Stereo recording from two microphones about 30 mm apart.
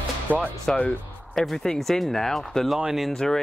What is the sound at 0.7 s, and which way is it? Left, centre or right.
Speech, centre.